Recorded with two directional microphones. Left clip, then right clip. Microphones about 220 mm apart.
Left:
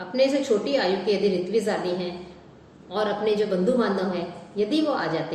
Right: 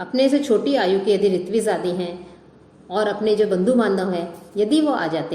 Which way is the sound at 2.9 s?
50° right (ahead or behind).